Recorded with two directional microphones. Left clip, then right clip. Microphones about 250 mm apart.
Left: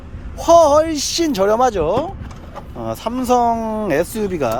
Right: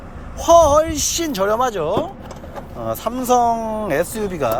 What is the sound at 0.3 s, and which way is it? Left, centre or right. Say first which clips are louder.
Speech: left 1 dB; centre.